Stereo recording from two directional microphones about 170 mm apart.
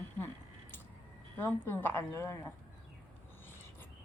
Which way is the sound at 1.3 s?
10° left (ahead or behind).